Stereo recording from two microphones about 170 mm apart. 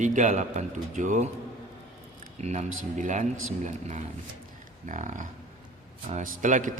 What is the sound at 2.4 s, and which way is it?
Speech, 45° right (ahead or behind).